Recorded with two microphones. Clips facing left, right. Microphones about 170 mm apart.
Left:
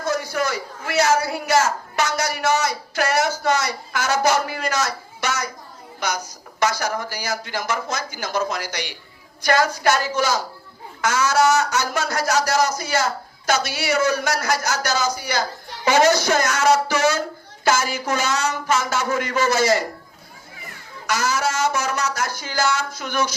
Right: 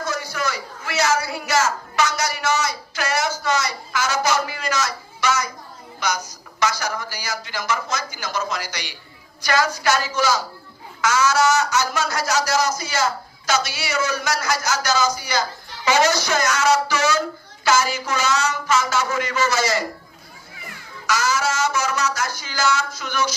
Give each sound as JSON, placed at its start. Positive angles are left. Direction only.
{"t": 0.0, "sound": "a sound", "side_deg": 55}
{"t": 6.6, "sound": "speech", "side_deg": 55}
{"t": 21.1, "sound": "speech", "side_deg": 55}